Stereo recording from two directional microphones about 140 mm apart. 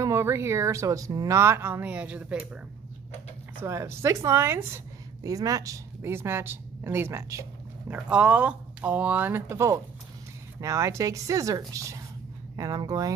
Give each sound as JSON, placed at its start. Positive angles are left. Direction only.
{"t": 0.0, "sound": "a woman's voice", "side_deg": -20}
{"t": 3.6, "sound": "a woman's voice", "side_deg": -20}
{"t": 7.9, "sound": "a woman's voice", "side_deg": -10}